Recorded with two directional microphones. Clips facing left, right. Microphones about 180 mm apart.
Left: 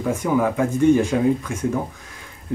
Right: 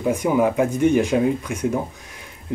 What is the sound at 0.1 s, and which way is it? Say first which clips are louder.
Speech: right 1 dB; 20° right (ahead or behind).